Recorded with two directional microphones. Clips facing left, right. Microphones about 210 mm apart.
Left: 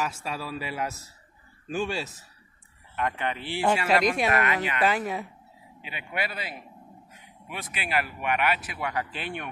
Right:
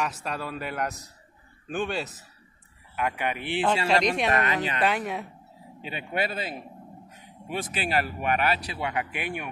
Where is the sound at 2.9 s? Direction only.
10° right (ahead or behind).